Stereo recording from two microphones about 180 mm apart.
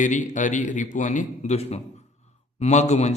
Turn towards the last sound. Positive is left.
turn(degrees=40)  # may be behind; listen again after turning